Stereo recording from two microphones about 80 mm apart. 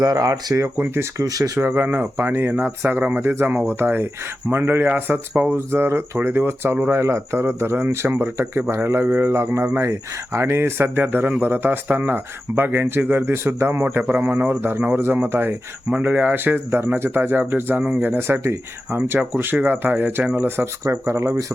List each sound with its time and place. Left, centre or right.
0.0 s speech: right
1.6 s speech: right
5.5 s speech: right
20.8 s speech: right